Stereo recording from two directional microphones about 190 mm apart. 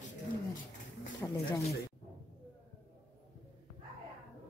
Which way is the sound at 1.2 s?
10° left (ahead or behind).